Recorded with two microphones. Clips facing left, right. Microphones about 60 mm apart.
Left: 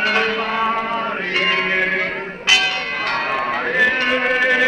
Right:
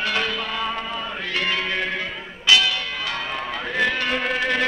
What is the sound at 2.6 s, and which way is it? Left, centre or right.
Church bell, left.